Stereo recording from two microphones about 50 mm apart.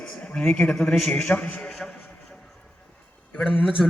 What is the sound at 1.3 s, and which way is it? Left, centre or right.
Speech, left.